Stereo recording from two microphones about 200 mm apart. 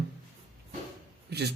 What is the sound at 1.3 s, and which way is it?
Speech, 55° right (ahead or behind).